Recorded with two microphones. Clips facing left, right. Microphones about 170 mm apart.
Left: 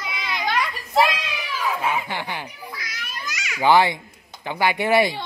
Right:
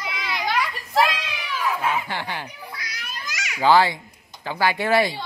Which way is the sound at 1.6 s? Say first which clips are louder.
Even; 10° left (ahead or behind).